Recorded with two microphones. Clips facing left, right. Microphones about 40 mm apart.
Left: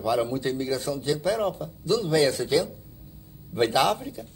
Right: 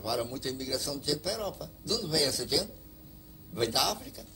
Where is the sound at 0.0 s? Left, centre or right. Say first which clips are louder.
Left 8 dB; left.